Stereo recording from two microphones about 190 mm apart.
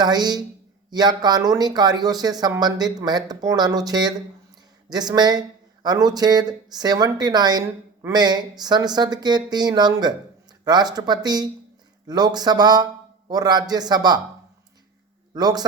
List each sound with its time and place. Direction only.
0.0 s speech: 20° right (ahead or behind)
15.4 s speech: 20° right (ahead or behind)